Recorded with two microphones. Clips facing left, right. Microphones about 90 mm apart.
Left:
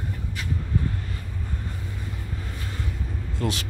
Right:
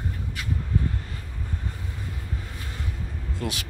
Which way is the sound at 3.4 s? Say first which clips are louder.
Left 4 dB; 10° right (ahead or behind).